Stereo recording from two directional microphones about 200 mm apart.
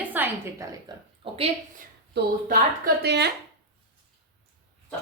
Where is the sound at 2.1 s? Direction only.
50° right (ahead or behind).